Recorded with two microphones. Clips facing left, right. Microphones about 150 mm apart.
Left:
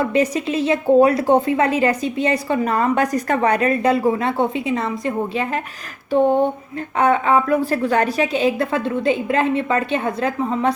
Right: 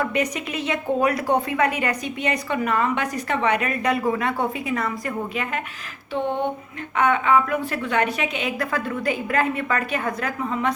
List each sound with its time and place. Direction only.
0.0 s a woman's voice: 30° left (ahead or behind)
6.1 s a woman's voice: 40° left (ahead or behind)